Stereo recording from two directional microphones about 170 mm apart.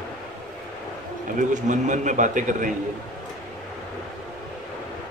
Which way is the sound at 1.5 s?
45° right (ahead or behind).